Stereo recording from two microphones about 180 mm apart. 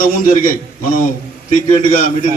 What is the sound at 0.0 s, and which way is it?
A man's voice, 50° left (ahead or behind).